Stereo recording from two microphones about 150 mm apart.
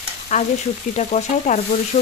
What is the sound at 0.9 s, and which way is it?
Speech, 50° left (ahead or behind).